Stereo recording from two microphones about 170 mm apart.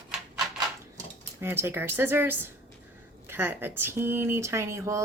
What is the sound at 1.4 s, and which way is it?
Speech, 15° right (ahead or behind).